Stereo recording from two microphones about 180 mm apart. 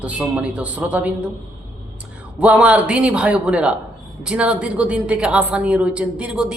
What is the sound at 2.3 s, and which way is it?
A man's voice, 10° right (ahead or behind).